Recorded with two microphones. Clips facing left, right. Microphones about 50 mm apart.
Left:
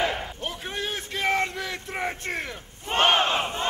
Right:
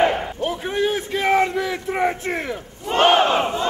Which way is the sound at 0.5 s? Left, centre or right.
Centre.